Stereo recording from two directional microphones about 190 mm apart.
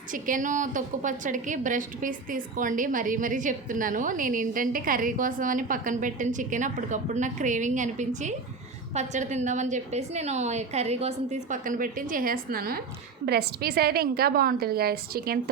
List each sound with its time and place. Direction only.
0.1 s a woman's voice: 45° right (ahead or behind)